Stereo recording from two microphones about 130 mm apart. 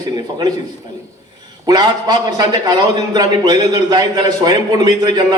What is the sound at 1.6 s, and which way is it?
A man's voice, 35° right (ahead or behind).